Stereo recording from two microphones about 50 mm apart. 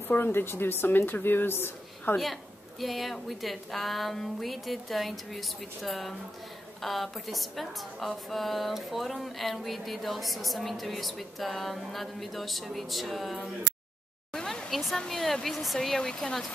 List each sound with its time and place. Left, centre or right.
0.1 s a woman's voice: left
2.8 s a woman's voice: centre
14.3 s a sound: centre
15.0 s a woman's voice: centre